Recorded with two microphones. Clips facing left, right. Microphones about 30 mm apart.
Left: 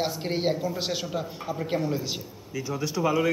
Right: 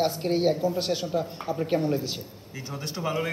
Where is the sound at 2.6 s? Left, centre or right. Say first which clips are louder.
Left 6 dB; right.